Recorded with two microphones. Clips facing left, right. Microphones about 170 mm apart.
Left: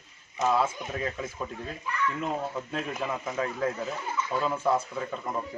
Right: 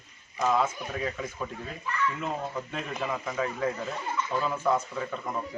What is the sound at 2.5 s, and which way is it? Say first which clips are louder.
Speech: left 1 dB; 5° left (ahead or behind).